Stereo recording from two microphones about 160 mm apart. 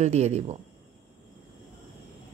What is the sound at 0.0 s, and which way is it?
Speech, 45° right (ahead or behind).